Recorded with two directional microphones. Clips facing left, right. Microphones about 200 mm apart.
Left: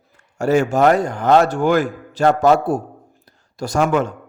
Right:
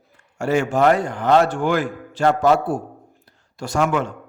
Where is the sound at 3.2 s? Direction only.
40° left (ahead or behind).